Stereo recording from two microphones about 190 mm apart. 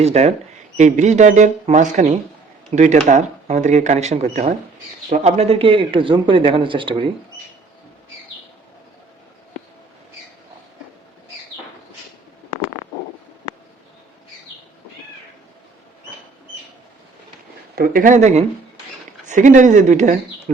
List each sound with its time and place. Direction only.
0.0 s a man's voice: 35° right (ahead or behind)
17.7 s speech: 50° right (ahead or behind)